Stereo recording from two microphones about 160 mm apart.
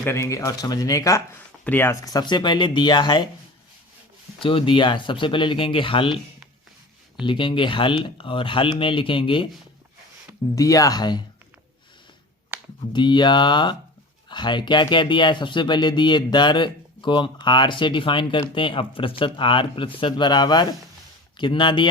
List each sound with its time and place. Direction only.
0.0 s speech: 15° left (ahead or behind)
4.4 s speech: 30° left (ahead or behind)
7.3 s speech: 30° left (ahead or behind)
10.5 s speech: 20° left (ahead or behind)
12.9 s speech: 30° left (ahead or behind)